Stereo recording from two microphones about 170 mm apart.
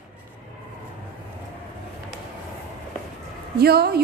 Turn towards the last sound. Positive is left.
turn(degrees=-65)  # may be behind; listen again after turning